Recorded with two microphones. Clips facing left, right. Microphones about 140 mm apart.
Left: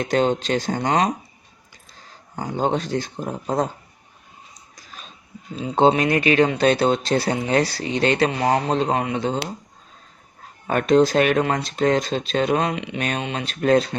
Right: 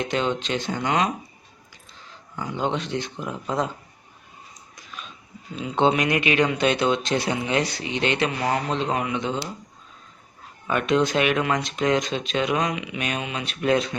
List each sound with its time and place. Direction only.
0.0 s speech: 40° left (ahead or behind)
4.7 s dog: 35° left (ahead or behind)
5.5 s speech: 35° left (ahead or behind)
10.7 s speech: 40° left (ahead or behind)